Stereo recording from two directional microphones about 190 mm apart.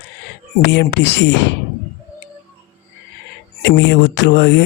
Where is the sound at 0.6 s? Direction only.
70° left (ahead or behind).